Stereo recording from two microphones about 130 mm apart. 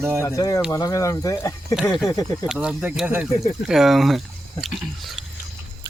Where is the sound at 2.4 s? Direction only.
5° right (ahead or behind).